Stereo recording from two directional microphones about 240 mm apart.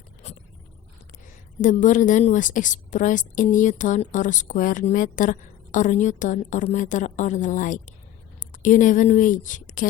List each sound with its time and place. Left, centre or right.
0.2 s vehicle: left
1.6 s a woman's voice: left